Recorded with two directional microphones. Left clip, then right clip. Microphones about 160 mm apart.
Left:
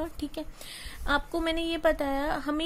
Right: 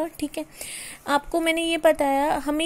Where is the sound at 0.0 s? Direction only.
20° right (ahead or behind).